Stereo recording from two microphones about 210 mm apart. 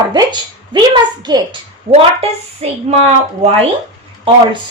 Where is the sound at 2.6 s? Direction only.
30° right (ahead or behind).